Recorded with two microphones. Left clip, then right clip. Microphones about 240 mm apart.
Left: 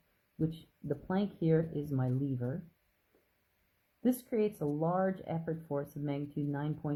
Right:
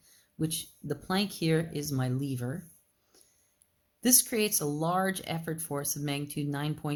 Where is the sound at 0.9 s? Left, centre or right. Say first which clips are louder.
Right 4 dB; right.